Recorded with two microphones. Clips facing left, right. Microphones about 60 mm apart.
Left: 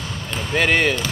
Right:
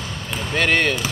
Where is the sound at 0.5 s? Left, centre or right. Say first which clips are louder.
Left 1 dB; centre.